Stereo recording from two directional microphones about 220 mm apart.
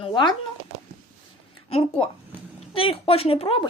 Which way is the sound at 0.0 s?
20° left (ahead or behind).